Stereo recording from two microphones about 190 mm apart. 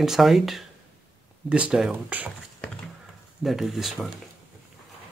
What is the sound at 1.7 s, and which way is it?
Speech, 5° right (ahead or behind).